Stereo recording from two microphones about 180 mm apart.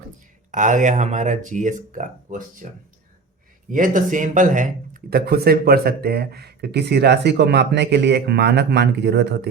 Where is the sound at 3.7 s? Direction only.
45° right (ahead or behind).